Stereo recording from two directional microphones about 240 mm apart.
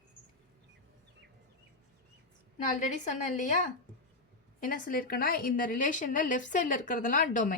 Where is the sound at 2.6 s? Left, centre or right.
Left.